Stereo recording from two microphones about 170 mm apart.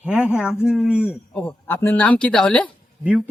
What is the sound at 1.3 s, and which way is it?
Speech, 5° left (ahead or behind).